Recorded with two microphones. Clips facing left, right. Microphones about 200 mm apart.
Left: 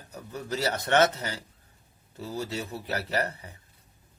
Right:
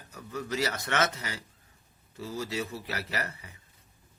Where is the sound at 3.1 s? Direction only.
30° left (ahead or behind).